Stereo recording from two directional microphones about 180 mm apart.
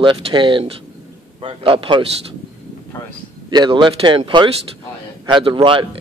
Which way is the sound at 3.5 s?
25° right (ahead or behind).